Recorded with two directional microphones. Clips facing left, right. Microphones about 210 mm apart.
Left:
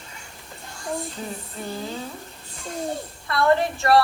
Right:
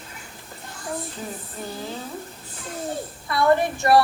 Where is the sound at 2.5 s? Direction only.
5° right (ahead or behind).